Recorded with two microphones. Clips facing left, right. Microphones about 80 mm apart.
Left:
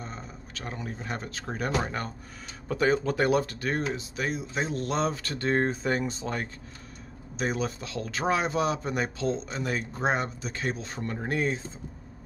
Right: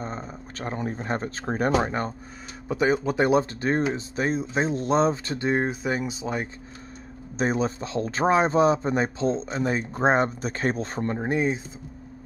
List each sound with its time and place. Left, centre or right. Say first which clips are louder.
0.0 s speech: right 7 dB; right
2.7 s speech: right 2 dB; centre
7.3 s a man's voice: right 5 dB; right
11.1 s speech: right 3 dB; right